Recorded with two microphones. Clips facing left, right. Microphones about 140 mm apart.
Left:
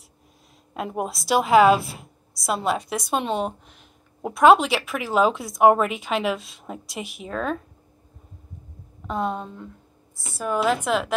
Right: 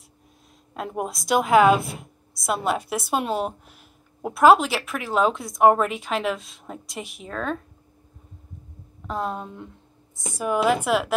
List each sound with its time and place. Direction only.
0.7 s speech: centre (ahead or behind)
9.0 s speech: centre (ahead or behind)
10.1 s a woman's voice: 15° right (ahead or behind)